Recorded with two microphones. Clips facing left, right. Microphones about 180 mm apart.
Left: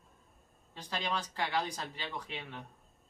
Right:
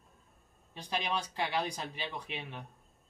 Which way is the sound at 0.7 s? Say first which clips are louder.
Right 2 dB; 15° right (ahead or behind).